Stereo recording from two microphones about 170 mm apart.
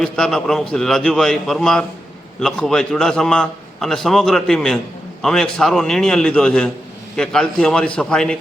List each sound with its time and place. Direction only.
0.0 s a man's voice: centre (ahead or behind)